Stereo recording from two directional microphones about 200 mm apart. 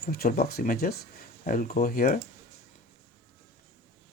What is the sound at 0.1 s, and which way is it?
Speech, 50° left (ahead or behind).